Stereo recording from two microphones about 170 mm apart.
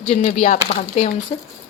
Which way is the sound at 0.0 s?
45° left (ahead or behind).